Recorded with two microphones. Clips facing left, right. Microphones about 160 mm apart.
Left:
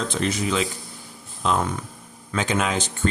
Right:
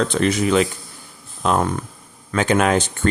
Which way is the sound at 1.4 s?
50° right (ahead or behind).